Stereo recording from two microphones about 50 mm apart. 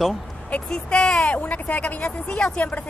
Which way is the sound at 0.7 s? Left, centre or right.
Centre.